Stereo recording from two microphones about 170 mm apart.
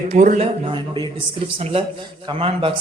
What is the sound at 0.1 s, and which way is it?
Speech, 40° right (ahead or behind).